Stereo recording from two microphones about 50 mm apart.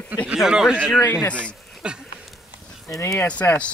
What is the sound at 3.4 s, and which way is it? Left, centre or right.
Speech, left.